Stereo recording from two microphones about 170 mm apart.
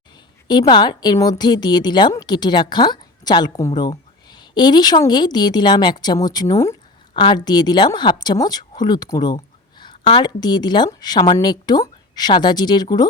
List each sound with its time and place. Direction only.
0.4 s speech: 25° left (ahead or behind)